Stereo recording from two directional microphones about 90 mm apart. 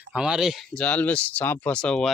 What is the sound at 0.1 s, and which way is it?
Speech, 10° right (ahead or behind).